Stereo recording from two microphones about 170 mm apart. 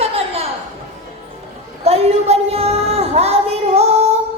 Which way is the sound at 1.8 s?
35° right (ahead or behind).